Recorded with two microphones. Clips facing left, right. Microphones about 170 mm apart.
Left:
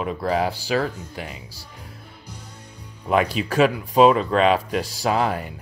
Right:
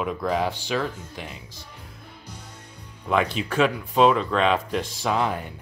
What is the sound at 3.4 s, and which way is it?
Speech, 40° left (ahead or behind).